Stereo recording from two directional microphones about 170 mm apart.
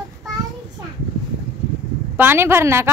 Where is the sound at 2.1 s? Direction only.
15° right (ahead or behind).